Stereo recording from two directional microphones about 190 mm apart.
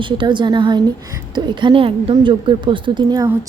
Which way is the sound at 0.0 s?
25° right (ahead or behind).